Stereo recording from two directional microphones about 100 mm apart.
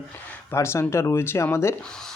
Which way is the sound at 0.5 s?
25° left (ahead or behind).